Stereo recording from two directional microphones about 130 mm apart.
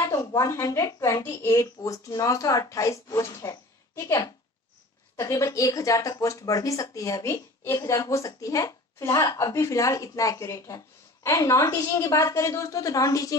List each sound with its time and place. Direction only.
0.0 s speech: 25° left (ahead or behind)